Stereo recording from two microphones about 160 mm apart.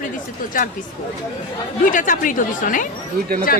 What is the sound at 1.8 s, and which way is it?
Speech, 55° left (ahead or behind).